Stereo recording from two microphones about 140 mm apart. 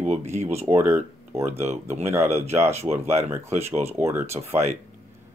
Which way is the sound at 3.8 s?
20° right (ahead or behind).